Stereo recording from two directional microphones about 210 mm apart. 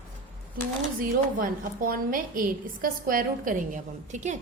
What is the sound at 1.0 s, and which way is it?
A woman's voice, 40° right (ahead or behind).